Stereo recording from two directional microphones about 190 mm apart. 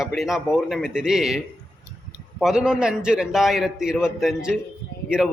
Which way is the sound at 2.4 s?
5° right (ahead or behind).